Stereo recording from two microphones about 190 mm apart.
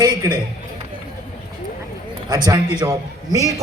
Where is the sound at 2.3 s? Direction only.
20° right (ahead or behind).